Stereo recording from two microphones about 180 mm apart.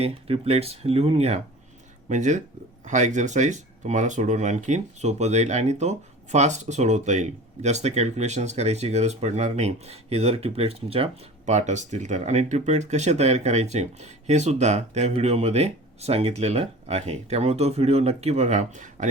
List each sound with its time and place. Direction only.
0.0 s speech: 35° right (ahead or behind)